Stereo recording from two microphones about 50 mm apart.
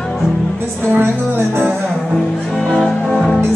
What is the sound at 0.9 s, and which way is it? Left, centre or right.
Speech, right.